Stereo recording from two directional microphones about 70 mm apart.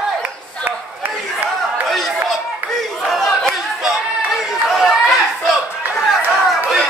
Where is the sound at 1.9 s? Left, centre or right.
Centre.